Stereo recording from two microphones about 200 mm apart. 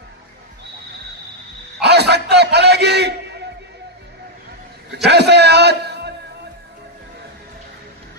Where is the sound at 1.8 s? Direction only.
55° right (ahead or behind).